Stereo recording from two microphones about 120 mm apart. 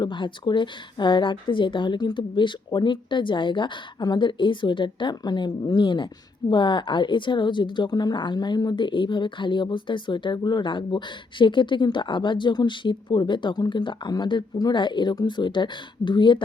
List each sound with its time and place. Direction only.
0.0 s a woman's voice: 40° left (ahead or behind)